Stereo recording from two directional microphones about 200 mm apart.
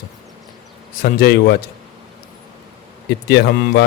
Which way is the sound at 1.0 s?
50° left (ahead or behind).